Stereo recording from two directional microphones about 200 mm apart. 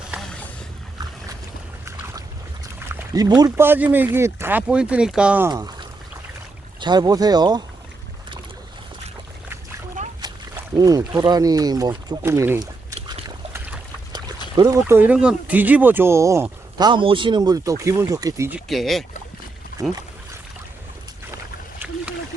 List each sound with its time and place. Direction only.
0.1 s boat: centre (ahead or behind)
2.9 s speech: 15° right (ahead or behind)
5.5 s speech: 20° right (ahead or behind)
6.7 s speech: 20° right (ahead or behind)
10.8 s speech: 20° right (ahead or behind)
13.1 s boat: 20° right (ahead or behind)
14.5 s speech: 20° right (ahead or behind)
18.7 s speech: centre (ahead or behind)